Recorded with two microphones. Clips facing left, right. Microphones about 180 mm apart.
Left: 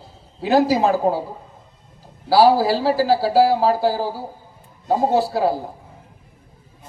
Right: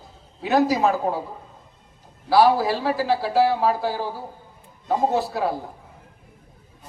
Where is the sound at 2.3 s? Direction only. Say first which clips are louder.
Left 3 dB; 30° left (ahead or behind).